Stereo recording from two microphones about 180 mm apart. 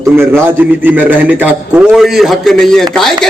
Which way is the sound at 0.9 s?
10° right (ahead or behind).